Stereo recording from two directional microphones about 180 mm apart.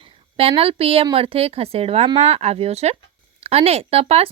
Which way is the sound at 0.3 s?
30° right (ahead or behind).